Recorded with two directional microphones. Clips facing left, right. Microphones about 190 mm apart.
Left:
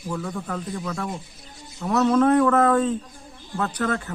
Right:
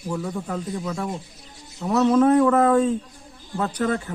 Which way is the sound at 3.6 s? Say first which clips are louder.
Right 2 dB; 25° right (ahead or behind).